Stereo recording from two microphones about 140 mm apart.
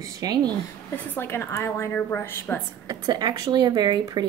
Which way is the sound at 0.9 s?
15° left (ahead or behind).